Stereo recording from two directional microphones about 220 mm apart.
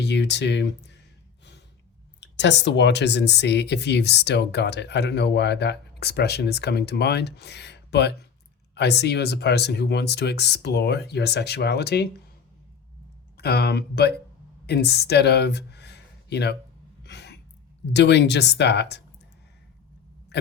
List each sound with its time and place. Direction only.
0.0 s speech: 50° left (ahead or behind)
2.2 s speech: 55° left (ahead or behind)
13.3 s speech: 45° left (ahead or behind)
17.0 s a sound: 50° left (ahead or behind)
17.9 s speech: 50° left (ahead or behind)